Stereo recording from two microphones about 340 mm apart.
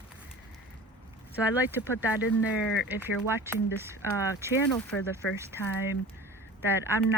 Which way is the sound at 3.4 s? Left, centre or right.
Centre.